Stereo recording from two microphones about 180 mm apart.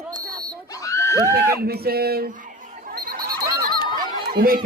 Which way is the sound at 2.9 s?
55° right (ahead or behind).